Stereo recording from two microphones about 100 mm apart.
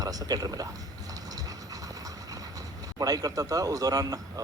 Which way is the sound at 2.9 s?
40° right (ahead or behind).